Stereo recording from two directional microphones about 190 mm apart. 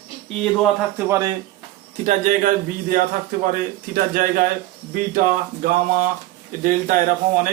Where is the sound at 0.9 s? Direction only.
15° right (ahead or behind).